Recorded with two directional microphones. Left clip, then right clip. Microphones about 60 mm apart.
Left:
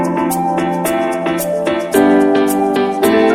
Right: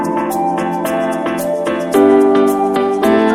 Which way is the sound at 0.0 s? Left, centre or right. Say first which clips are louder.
Even; centre.